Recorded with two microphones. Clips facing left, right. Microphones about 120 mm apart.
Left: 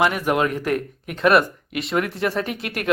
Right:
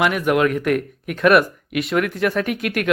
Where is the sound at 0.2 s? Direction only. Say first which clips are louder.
Right 3 dB; 30° left (ahead or behind).